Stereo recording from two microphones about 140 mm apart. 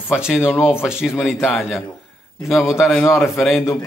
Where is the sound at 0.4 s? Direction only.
15° left (ahead or behind).